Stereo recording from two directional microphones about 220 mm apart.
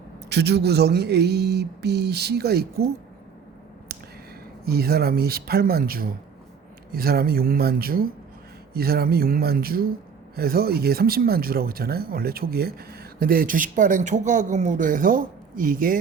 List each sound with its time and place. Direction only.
0.3 s speech: 50° right (ahead or behind)
4.6 s speech: 45° right (ahead or behind)